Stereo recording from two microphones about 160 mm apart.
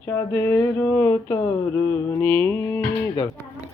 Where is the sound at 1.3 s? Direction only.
25° left (ahead or behind).